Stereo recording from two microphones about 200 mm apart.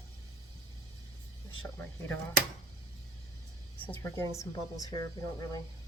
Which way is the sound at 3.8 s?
10° left (ahead or behind).